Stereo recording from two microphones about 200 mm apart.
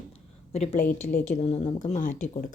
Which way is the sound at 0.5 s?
35° left (ahead or behind).